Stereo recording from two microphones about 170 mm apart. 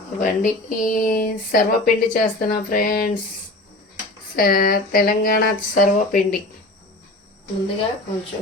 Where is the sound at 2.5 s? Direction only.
55° left (ahead or behind).